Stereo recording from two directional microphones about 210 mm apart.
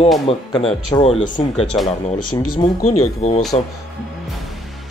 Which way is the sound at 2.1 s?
90° left.